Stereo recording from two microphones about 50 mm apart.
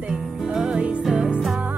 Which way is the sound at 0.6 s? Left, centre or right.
Right.